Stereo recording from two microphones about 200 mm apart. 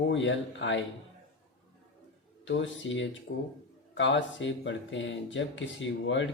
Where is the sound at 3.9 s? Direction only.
65° left (ahead or behind).